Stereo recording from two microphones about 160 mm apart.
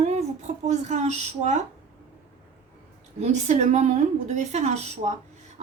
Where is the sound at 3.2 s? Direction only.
45° right (ahead or behind).